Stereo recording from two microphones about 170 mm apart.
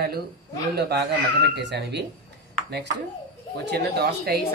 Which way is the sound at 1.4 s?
80° right.